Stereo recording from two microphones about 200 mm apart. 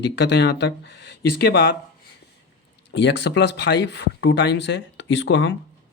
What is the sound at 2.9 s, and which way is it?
Speech, 60° left (ahead or behind).